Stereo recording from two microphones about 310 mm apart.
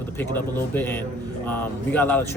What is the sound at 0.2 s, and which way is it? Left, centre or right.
Speech, centre.